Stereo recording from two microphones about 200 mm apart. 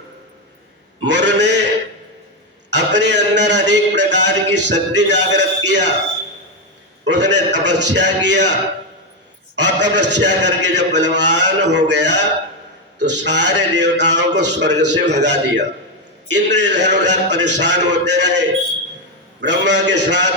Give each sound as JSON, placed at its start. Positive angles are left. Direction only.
{"t": 1.0, "sound": "a man's voice", "side_deg": -60}
{"t": 2.6, "sound": "a sound", "side_deg": -60}
{"t": 4.7, "sound": "a man's voice", "side_deg": -60}
{"t": 7.0, "sound": "a man's voice", "side_deg": -60}
{"t": 9.6, "sound": "a man's voice", "side_deg": -60}